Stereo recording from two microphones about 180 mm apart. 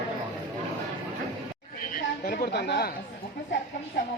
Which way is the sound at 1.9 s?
50° left (ahead or behind).